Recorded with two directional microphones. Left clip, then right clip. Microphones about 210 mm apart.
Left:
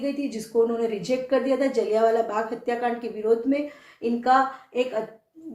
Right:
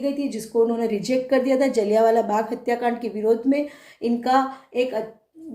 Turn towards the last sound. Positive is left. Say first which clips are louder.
# right 2 dB
turn(degrees=-25)  # may be behind; listen again after turning